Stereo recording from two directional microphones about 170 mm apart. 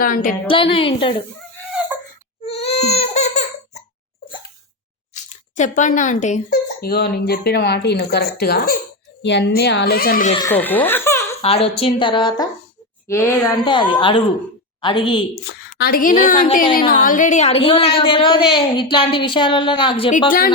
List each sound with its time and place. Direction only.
0.0 s a woman's voice: 50° left (ahead or behind)
0.4 s a woman's voice: 30° left (ahead or behind)
2.4 s baby cry: 35° left (ahead or behind)
5.1 s speech: 45° left (ahead or behind)
6.5 s speech: 65° left (ahead or behind)
9.2 s speech: 90° left; by 10.3 s 55° left (ahead or behind)
10.5 s speech: 10° left (ahead or behind)
11.4 s a woman's voice: 35° left (ahead or behind)
13.1 s a woman's voice: 15° left (ahead or behind)
13.7 s a woman's voice: 30° left (ahead or behind)
15.8 s a woman's voice: 55° left (ahead or behind); by 20.1 s 30° left (ahead or behind)